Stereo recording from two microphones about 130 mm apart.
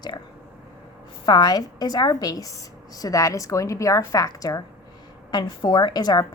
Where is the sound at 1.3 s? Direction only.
35° left (ahead or behind).